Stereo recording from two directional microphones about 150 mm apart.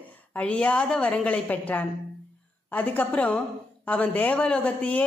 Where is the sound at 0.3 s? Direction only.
10° left (ahead or behind).